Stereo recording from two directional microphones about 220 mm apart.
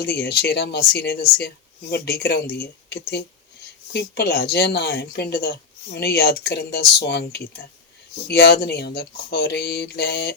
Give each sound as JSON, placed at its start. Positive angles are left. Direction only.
{"t": 0.0, "sound": "speech", "side_deg": 45}